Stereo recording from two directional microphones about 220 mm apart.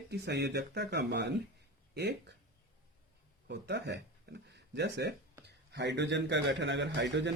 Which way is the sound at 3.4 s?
50° right (ahead or behind).